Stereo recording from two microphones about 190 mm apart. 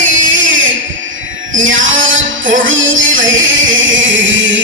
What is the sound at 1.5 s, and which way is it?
Music, 85° right.